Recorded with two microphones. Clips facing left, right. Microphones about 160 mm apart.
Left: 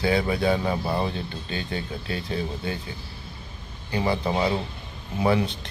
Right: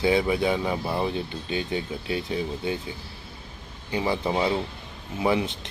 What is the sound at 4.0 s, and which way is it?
Speech, 10° right (ahead or behind).